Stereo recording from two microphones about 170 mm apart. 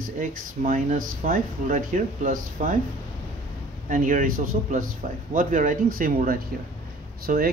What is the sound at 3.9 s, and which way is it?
Speech, 50° right (ahead or behind).